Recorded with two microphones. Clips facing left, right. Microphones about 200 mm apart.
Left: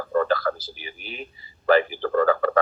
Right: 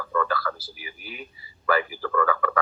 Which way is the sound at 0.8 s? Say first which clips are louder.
Left 3 dB; 25° left (ahead or behind).